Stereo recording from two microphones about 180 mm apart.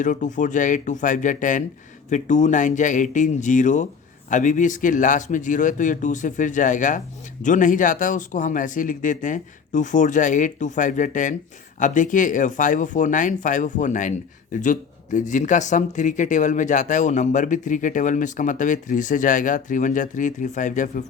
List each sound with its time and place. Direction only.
0.0 s speech: 45° left (ahead or behind)